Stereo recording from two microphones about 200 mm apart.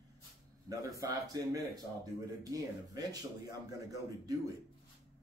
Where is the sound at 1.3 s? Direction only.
20° right (ahead or behind).